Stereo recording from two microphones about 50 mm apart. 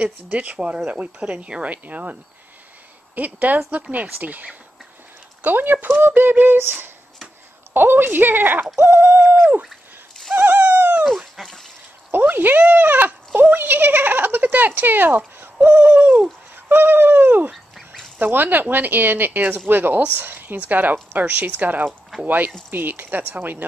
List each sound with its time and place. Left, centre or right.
0.3 s speech: right
3.2 s bird: right
6.0 s speech: right
8.8 s bird: right
10.3 s dog: right
11.4 s speech: centre
12.1 s speech: right
15.6 s bird: right
19.7 s speech: right
20.2 s bird: right